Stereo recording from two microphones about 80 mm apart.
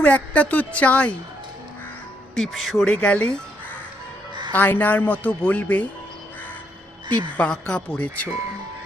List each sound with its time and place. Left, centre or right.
0.0 s a woman's voice: centre
2.3 s speech: centre
2.8 s a woman's voice: centre
4.5 s speech: left
7.3 s a woman's voice: centre